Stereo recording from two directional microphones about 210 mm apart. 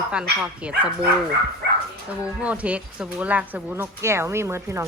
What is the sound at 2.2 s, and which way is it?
Speech, 5° right (ahead or behind).